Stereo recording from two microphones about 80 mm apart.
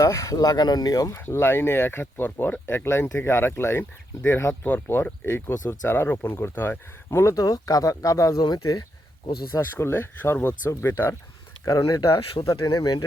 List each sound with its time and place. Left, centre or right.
0.0 s speech: left
1.2 s speech: left
4.6 s speech: left
7.3 s speech: left
9.6 s speech: left
11.6 s speech: left
12.5 s speech: left